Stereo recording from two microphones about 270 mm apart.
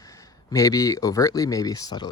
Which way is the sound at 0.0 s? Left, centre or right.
Centre.